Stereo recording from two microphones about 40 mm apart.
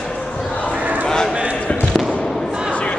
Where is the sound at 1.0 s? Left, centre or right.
Centre.